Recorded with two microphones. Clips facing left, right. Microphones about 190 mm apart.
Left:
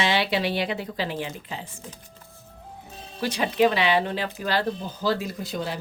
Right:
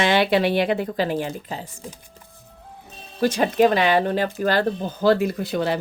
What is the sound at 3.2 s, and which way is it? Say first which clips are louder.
Speech: right 4 dB; 45° right (ahead or behind).